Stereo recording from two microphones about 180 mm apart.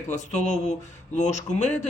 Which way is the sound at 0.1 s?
40° left (ahead or behind).